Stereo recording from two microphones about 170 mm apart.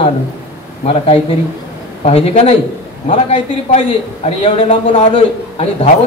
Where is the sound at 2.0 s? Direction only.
40° left (ahead or behind).